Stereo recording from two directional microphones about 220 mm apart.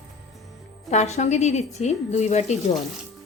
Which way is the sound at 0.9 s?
30° left (ahead or behind).